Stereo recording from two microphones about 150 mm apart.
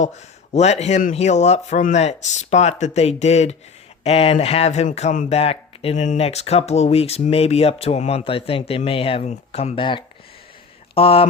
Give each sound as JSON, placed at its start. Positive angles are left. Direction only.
{"t": 0.0, "sound": "speech", "side_deg": 50}